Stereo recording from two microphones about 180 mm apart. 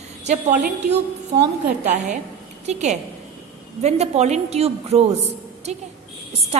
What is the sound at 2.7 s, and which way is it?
A woman's voice, 40° right (ahead or behind).